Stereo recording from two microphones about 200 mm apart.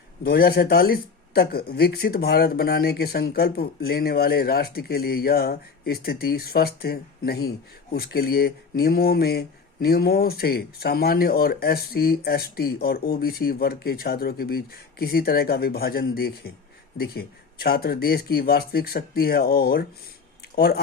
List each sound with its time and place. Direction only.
0.3 s speech: 50° left (ahead or behind)